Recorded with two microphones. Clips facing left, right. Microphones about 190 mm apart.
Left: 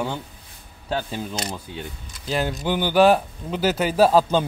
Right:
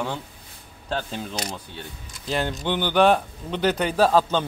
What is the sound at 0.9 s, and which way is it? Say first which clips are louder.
Speech: left 2 dB; 5° left (ahead or behind).